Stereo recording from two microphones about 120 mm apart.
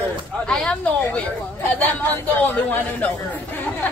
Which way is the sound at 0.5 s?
5° left (ahead or behind).